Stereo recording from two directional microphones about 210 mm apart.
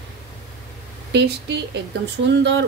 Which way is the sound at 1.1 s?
55° right (ahead or behind).